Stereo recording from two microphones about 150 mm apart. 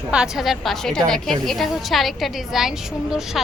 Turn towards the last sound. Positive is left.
turn(degrees=-5)  # may be behind; listen again after turning